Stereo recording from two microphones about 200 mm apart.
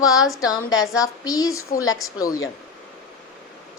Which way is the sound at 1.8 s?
90° left.